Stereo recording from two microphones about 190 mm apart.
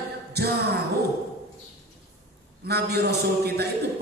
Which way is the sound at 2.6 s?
60° right (ahead or behind).